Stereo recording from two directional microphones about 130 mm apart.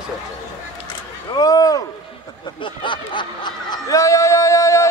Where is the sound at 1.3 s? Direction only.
30° left (ahead or behind).